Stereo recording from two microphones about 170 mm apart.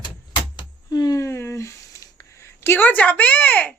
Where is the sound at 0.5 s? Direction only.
25° left (ahead or behind).